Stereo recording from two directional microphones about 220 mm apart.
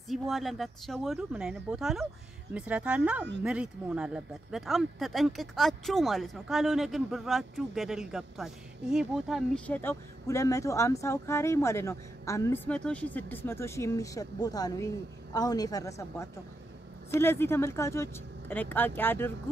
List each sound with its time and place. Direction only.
0.1 s speech: centre (ahead or behind)